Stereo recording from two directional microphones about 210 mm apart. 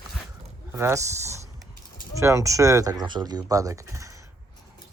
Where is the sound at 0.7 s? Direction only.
15° right (ahead or behind).